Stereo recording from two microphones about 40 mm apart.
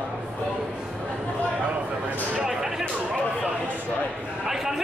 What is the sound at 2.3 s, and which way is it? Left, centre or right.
Speech, centre.